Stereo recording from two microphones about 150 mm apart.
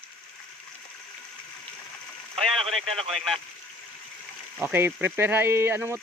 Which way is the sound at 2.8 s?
Centre (ahead or behind).